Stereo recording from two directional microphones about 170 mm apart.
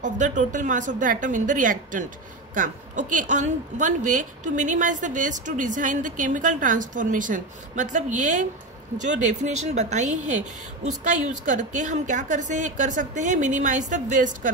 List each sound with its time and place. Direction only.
0.0 s a woman's voice: 45° right (ahead or behind)